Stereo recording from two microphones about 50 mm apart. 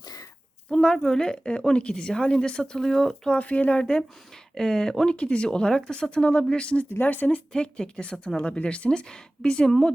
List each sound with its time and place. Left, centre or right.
0.7 s a sound: centre
0.9 s speech: centre
3.3 s speech: left
7.0 s speech: left
7.5 s speech: centre